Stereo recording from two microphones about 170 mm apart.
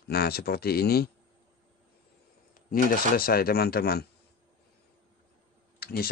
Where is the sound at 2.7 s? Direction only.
60° left (ahead or behind).